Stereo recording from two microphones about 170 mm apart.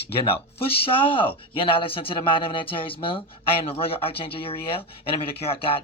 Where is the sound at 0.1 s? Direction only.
35° left (ahead or behind).